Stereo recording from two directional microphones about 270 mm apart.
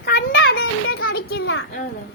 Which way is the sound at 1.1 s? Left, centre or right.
Left.